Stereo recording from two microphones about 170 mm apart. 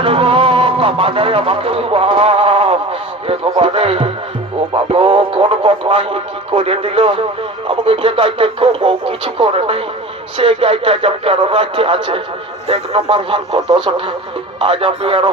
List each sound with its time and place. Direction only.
0.0 s music: 35° right (ahead or behind)